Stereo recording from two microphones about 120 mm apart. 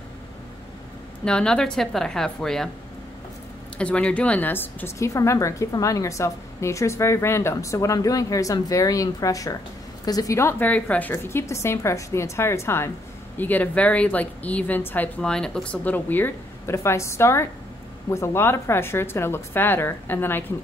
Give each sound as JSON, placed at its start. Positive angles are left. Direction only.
{"t": 1.2, "sound": "a woman's voice", "side_deg": 5}
{"t": 3.7, "sound": "a woman's voice", "side_deg": 10}